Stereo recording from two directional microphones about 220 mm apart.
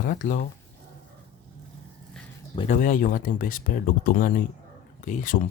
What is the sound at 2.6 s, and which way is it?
Speech, 35° left (ahead or behind).